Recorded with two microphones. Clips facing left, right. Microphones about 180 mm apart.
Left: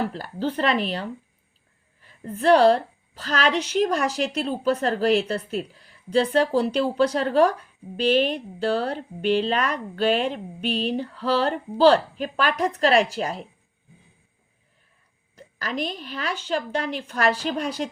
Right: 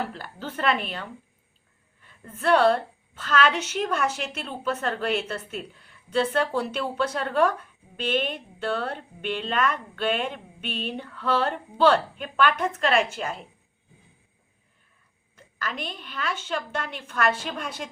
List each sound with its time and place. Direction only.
0.1 s a woman's voice: 35° left (ahead or behind)
15.4 s a sound: 40° left (ahead or behind)
15.9 s a woman's voice: 40° left (ahead or behind)